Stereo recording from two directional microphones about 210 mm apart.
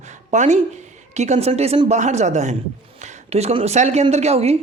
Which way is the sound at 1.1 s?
35° right (ahead or behind).